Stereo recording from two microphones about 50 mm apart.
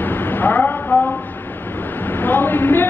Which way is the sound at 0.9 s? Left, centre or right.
Left.